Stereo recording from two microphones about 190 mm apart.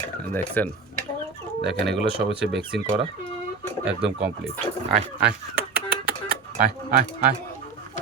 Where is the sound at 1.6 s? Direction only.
65° right (ahead or behind).